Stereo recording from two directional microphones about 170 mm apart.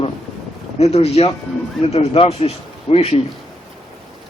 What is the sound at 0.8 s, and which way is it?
Speech, 40° left (ahead or behind).